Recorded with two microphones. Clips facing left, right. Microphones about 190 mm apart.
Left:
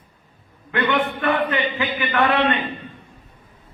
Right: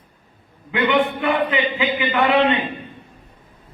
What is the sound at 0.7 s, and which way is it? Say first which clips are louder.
A man's voice: right 3 dB; 15° right (ahead or behind).